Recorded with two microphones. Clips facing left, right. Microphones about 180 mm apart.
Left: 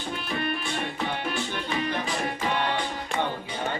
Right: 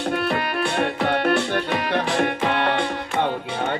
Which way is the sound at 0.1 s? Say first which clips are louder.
Right 5 dB; 75° right (ahead or behind).